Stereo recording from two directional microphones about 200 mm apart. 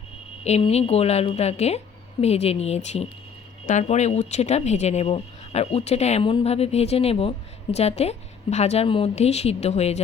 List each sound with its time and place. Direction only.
0.4 s speech: 30° left (ahead or behind)